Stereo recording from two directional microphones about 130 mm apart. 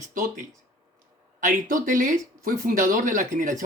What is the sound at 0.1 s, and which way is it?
Speech, 90° right.